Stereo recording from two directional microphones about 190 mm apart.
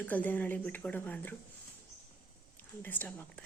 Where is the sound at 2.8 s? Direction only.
10° left (ahead or behind).